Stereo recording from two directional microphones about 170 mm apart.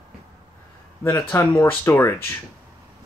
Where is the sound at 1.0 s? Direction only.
15° left (ahead or behind).